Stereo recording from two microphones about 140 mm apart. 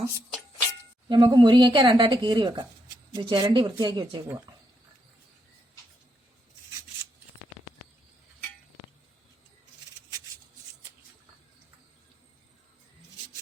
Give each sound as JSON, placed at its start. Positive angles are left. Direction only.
{"t": 1.0, "sound": "speech", "side_deg": -30}